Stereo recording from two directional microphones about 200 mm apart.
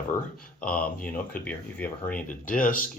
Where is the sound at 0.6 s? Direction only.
5° left (ahead or behind).